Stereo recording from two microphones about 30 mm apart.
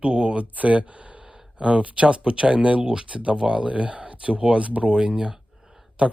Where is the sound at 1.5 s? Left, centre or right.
Right.